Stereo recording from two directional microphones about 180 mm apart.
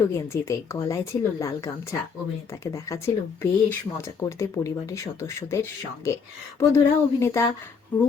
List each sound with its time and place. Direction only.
0.0 s speech: 15° left (ahead or behind)